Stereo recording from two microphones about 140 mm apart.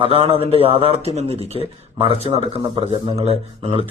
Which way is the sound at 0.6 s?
40° right (ahead or behind).